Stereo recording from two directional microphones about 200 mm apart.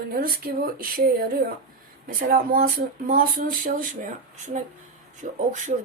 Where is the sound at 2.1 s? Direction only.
45° right (ahead or behind).